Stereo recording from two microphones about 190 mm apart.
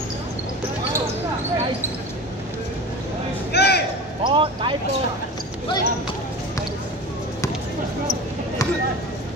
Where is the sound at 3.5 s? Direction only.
60° left (ahead or behind).